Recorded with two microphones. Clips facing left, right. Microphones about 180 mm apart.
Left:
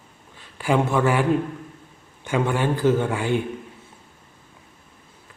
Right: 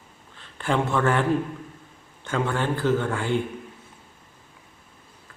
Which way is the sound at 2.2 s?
15° left (ahead or behind).